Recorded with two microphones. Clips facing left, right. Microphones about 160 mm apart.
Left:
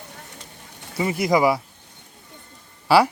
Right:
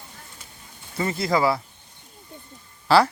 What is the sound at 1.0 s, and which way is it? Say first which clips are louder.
Speech: left 3 dB; 15° left (ahead or behind).